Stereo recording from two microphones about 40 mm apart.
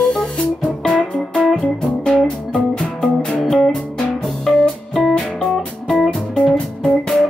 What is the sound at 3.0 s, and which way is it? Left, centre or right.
Music, centre.